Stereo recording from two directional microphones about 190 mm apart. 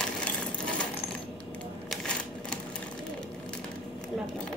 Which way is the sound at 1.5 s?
5° left (ahead or behind).